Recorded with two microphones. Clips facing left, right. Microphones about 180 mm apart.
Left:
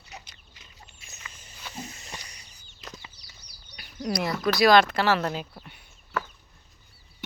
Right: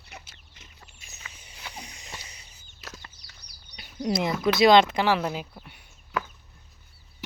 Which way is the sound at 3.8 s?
25° right (ahead or behind).